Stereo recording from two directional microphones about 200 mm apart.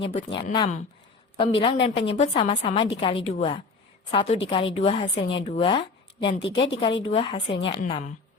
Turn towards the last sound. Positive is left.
turn(degrees=25)  # may be behind; listen again after turning